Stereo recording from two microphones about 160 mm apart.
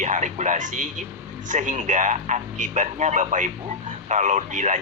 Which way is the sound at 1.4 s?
50° right (ahead or behind).